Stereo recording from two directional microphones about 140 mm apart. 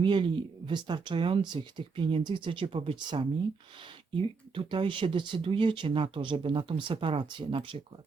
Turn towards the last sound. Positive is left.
turn(degrees=-40)  # may be behind; listen again after turning